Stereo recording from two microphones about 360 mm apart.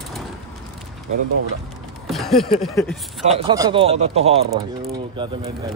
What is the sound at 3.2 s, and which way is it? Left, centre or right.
Speech, centre.